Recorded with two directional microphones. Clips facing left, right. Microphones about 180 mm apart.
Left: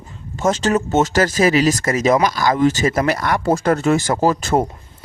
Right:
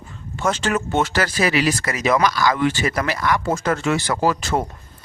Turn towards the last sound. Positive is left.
turn(degrees=45)  # may be behind; listen again after turning